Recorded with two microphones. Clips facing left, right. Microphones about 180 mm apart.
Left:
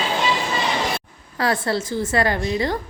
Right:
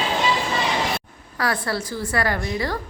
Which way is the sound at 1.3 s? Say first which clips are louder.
Left 3 dB; 25° left (ahead or behind).